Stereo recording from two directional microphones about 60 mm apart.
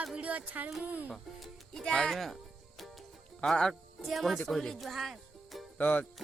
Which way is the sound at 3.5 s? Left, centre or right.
Centre.